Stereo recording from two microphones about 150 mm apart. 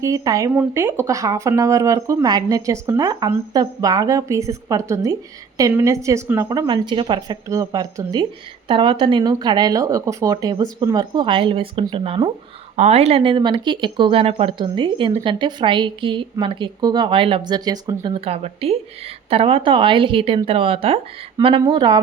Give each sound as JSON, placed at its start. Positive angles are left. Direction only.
{"t": 0.0, "sound": "a woman's voice", "side_deg": -20}
{"t": 18.1, "sound": "speech", "side_deg": -40}